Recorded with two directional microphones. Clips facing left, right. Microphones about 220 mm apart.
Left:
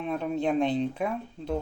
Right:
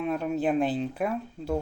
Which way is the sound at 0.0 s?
Centre (ahead or behind).